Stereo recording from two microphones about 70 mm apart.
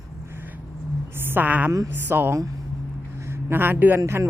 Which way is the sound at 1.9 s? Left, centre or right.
Right.